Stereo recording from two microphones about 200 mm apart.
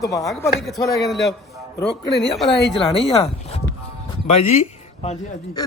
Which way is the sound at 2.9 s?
30° left (ahead or behind).